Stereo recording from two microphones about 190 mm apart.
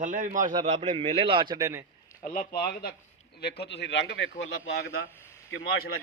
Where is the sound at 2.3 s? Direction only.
55° left (ahead or behind).